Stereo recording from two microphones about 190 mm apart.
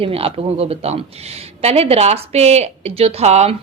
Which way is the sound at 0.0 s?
30° right (ahead or behind).